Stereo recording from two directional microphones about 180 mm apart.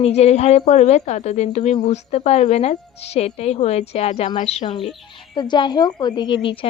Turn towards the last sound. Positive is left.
turn(degrees=30)  # may be behind; listen again after turning